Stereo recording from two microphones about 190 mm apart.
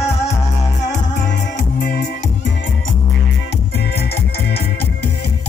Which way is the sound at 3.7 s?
55° left (ahead or behind).